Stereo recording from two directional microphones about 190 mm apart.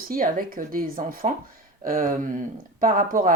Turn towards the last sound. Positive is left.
turn(degrees=-45)  # may be behind; listen again after turning